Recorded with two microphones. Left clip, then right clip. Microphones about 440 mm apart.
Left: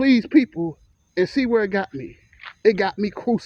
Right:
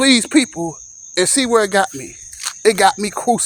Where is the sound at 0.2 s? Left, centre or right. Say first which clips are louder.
Right 3 dB; left.